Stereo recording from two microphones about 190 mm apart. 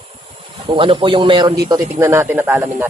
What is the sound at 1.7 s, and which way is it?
Speech, 15° right (ahead or behind).